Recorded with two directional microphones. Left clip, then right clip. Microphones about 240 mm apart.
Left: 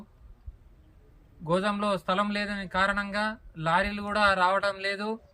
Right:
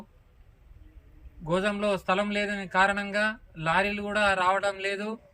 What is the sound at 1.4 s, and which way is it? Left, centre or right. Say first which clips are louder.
A man's voice: even; centre.